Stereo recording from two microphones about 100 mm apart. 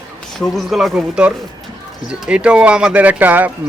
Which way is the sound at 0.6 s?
Centre (ahead or behind).